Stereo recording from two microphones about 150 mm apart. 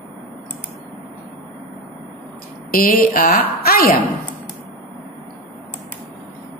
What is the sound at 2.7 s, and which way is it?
A woman's voice, 70° left (ahead or behind).